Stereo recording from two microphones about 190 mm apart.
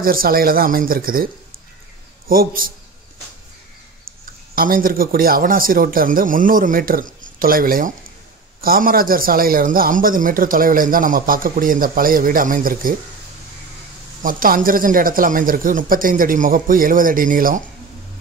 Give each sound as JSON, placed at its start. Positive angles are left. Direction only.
{"t": 0.0, "sound": "a man's voice", "side_deg": -50}
{"t": 4.6, "sound": "a man's voice", "side_deg": -50}
{"t": 14.2, "sound": "a man's voice", "side_deg": -45}